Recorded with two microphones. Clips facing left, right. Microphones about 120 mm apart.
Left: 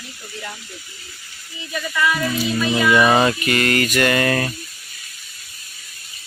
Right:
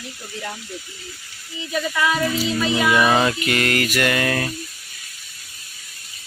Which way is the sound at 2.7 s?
5° right (ahead or behind).